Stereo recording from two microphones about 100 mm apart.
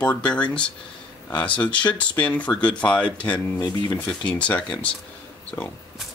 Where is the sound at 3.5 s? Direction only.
45° left (ahead or behind).